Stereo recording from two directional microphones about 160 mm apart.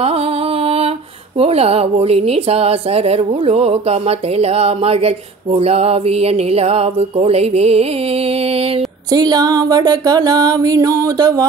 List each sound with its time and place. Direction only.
0.0 s music: 40° right (ahead or behind)
1.4 s speech: 40° right (ahead or behind)
9.1 s music: 25° right (ahead or behind)